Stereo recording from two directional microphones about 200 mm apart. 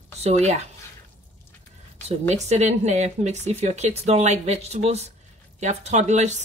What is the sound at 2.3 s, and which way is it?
Speech, 35° right (ahead or behind).